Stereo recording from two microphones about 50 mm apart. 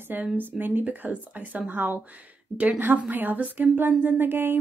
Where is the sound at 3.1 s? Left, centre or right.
Right.